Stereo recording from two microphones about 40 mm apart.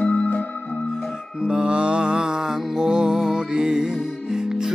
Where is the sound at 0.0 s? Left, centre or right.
Left.